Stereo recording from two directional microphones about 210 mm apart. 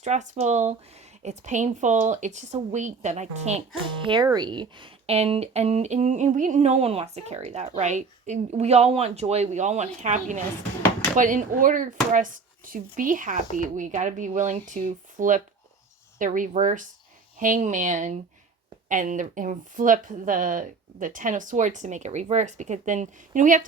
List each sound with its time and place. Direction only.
0.0 s speech: 35° right (ahead or behind)
4.0 s speech: 20° right (ahead or behind); by 23.6 s 40° right (ahead or behind)